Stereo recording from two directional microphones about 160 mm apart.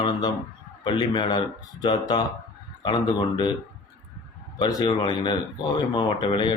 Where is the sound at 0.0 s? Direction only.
25° left (ahead or behind).